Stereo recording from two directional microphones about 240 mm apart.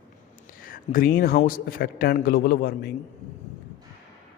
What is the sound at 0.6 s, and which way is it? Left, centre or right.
A man's voice, left.